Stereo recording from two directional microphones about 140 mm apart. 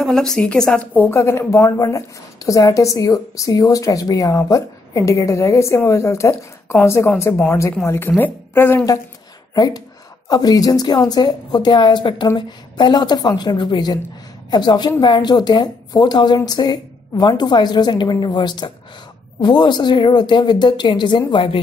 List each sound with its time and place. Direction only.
0.0 s a woman's voice: 5° left (ahead or behind); by 21.5 s 40° left (ahead or behind)